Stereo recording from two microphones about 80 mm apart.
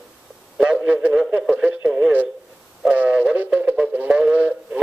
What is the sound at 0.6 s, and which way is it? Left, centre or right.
Radio, centre.